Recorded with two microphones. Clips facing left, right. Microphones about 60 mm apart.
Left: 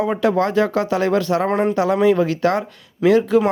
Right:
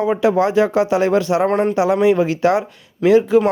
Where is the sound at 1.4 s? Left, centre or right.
Centre.